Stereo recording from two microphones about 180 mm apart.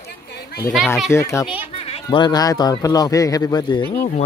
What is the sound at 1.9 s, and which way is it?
Speech, 25° left (ahead or behind).